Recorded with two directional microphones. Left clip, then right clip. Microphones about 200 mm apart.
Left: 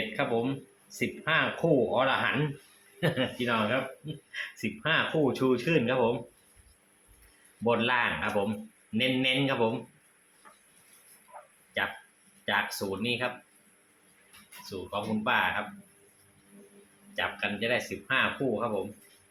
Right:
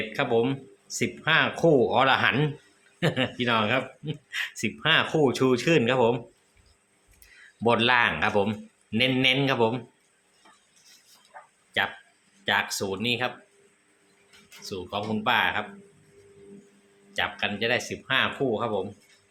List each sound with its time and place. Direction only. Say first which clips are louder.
0.2 s speech: right 6 dB; 40° right (ahead or behind)
3.0 s speech: right 3 dB; 30° right (ahead or behind)
7.6 s speech: right 5 dB; 45° right (ahead or behind)
11.3 s a sound: right 2 dB; 30° right (ahead or behind)
12.5 s speech: right 4 dB; 35° right (ahead or behind)
14.6 s speech: right 3 dB; 35° right (ahead or behind)
17.2 s speech: right 3 dB; 30° right (ahead or behind)